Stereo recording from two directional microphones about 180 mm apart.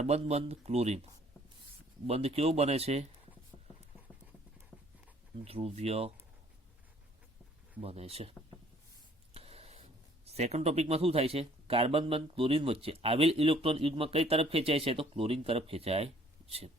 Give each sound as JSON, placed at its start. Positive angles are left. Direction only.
{"t": 0.0, "sound": "speech", "side_deg": -35}
{"t": 2.0, "sound": "speech", "side_deg": -35}
{"t": 5.5, "sound": "speech", "side_deg": -35}
{"t": 7.8, "sound": "speech", "side_deg": -35}
{"t": 9.3, "sound": "a sound", "side_deg": -35}
{"t": 10.2, "sound": "speech", "side_deg": -35}